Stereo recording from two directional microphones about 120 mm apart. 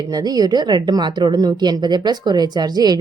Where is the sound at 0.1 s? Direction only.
35° right (ahead or behind).